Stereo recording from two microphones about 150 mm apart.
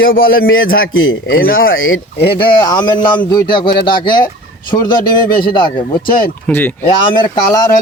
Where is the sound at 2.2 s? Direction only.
30° left (ahead or behind).